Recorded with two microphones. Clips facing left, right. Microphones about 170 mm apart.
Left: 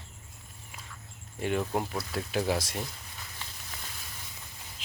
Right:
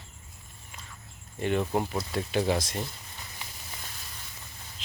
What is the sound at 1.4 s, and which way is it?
Speech, 5° left (ahead or behind).